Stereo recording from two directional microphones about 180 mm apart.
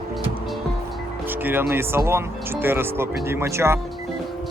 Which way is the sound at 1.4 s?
10° right (ahead or behind).